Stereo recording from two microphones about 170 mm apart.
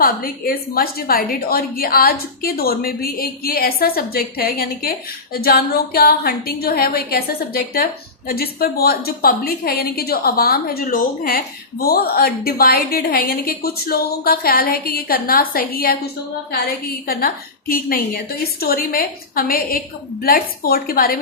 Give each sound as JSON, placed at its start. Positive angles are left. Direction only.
{"t": 0.0, "sound": "a woman's voice", "side_deg": 60}
{"t": 17.1, "sound": "a woman's voice", "side_deg": 60}